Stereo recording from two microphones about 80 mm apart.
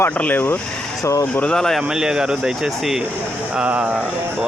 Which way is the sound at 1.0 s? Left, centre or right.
Left.